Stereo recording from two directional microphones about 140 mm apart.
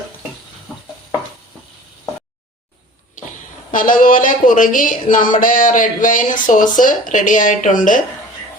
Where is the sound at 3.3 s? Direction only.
70° left (ahead or behind).